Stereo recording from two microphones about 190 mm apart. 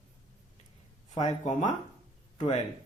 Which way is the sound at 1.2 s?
35° left (ahead or behind).